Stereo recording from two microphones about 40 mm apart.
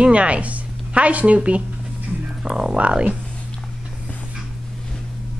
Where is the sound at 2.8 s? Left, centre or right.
Right.